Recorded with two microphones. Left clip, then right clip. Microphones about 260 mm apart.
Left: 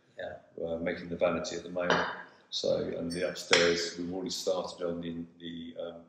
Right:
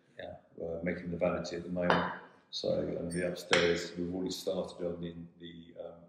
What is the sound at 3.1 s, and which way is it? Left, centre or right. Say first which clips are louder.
Speech: left 4 dB; left.